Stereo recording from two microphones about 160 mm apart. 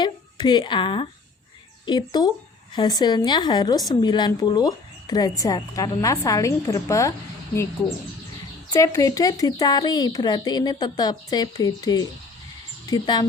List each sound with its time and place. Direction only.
0.0 s speech: 25° left (ahead or behind)